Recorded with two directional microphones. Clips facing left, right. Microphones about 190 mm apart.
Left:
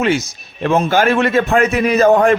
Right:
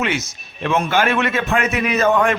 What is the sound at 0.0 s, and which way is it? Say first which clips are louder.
A man's voice: left 6 dB; 35° left (ahead or behind).